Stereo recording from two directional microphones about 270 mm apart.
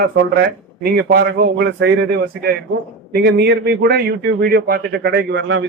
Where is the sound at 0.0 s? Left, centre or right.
Right.